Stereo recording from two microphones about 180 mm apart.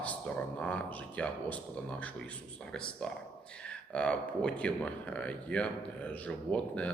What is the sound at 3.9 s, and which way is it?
A man's voice, 5° left (ahead or behind).